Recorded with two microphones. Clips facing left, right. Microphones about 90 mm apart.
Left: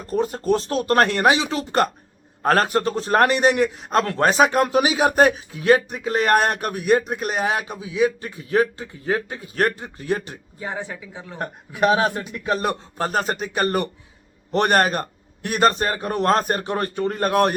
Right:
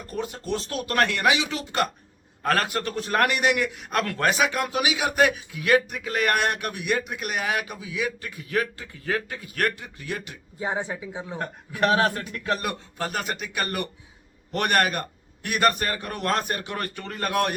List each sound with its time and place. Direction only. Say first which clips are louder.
0.0 s a man's voice: left 9 dB; 35° left (ahead or behind)
10.6 s speech: right 2 dB; 20° right (ahead or behind)
11.3 s speech: left 4 dB; 20° left (ahead or behind)
12.6 s a man's voice: left 6 dB; 35° left (ahead or behind)